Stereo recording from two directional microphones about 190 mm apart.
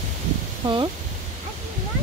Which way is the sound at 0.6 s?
25° right (ahead or behind).